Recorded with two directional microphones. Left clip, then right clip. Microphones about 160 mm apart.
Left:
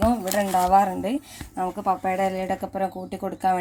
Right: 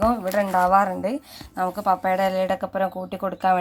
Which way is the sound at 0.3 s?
Centre (ahead or behind).